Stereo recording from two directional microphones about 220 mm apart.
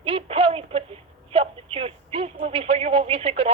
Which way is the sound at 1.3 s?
25° right (ahead or behind).